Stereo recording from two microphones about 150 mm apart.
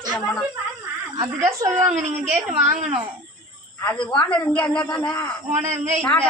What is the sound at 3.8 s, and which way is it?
Speech, 10° left (ahead or behind).